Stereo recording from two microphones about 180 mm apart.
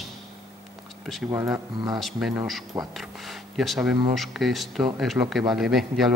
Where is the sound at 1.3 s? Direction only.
15° right (ahead or behind).